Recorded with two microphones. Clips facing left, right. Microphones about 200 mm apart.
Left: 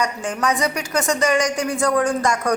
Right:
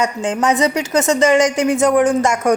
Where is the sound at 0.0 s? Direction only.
25° right (ahead or behind).